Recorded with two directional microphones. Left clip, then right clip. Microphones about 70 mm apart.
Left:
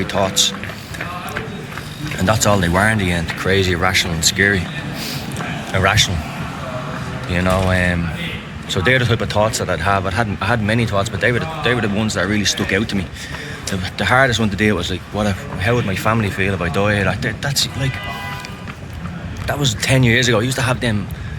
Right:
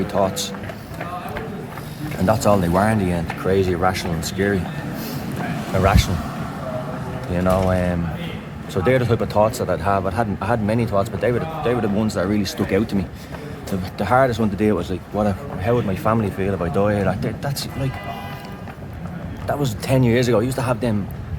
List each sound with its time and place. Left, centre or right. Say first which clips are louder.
0.1 s speech: left 6 dB; right
2.2 s speech: left 1 dB; right
3.0 s speech: left 3 dB; right
4.9 s a sound: left 4 dB; right
5.7 s speech: left 4 dB; right
7.3 s speech: left 1 dB; centre
8.7 s speech: left 3 dB; right
11.9 s speech: left 2 dB; right
16.2 s speech: left 3 dB; centre
16.7 s speech: left 2 dB; right
19.5 s speech: left 4 dB; right